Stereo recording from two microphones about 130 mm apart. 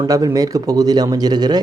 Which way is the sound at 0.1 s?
30° right (ahead or behind).